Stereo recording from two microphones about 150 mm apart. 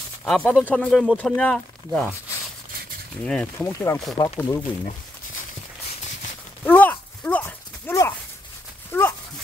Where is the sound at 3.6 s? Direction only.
20° left (ahead or behind).